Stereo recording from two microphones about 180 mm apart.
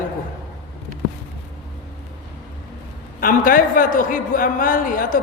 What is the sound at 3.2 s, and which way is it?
A man's voice, 50° left (ahead or behind).